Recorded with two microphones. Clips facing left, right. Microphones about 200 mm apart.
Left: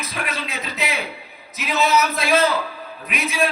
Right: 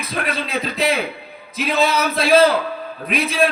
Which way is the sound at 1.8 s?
30° right (ahead or behind).